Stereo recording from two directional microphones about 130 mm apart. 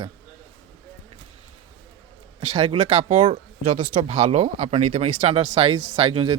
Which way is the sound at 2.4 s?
55° right (ahead or behind).